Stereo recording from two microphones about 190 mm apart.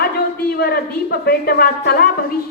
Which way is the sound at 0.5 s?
55° left (ahead or behind).